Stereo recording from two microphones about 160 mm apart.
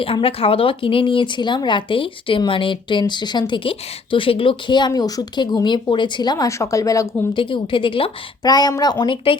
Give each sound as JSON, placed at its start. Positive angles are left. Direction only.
{"t": 0.0, "sound": "speech", "side_deg": 35}
{"t": 7.3, "sound": "speech", "side_deg": 30}